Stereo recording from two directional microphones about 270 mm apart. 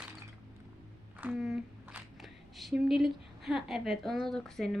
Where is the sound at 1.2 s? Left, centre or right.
Centre.